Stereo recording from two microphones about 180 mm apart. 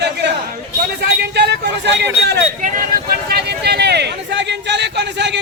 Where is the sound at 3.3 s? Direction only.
65° right (ahead or behind).